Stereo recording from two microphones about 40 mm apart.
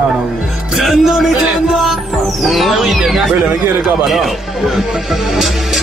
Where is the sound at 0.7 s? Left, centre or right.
Centre.